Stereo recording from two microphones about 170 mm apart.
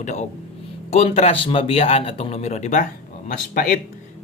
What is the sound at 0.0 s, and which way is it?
Speech, 45° left (ahead or behind).